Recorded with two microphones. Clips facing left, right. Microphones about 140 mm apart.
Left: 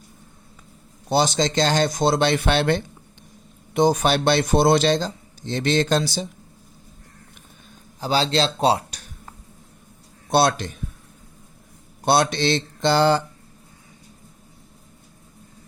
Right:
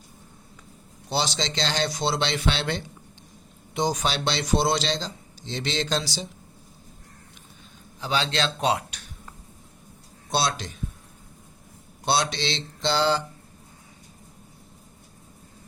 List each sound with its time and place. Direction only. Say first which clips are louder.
1.1 s speech: left 8 dB; 50° left (ahead or behind)
8.0 s speech: left 5 dB; 35° left (ahead or behind)
10.3 s speech: left 7 dB; 55° left (ahead or behind)
12.0 s speech: left 6 dB; 55° left (ahead or behind)